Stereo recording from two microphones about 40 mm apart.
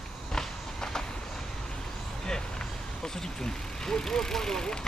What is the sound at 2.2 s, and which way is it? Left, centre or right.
Vehicle, centre.